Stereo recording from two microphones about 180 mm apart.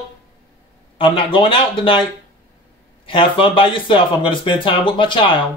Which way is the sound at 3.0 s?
30° left (ahead or behind).